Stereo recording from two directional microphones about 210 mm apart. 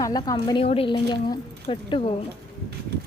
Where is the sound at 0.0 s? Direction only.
15° left (ahead or behind).